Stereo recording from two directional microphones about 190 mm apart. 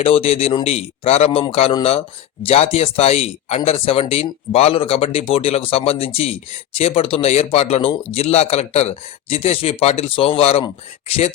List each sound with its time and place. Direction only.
0.0 s a man's voice: 30° left (ahead or behind)